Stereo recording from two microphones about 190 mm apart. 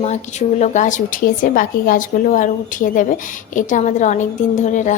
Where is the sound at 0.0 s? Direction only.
35° left (ahead or behind).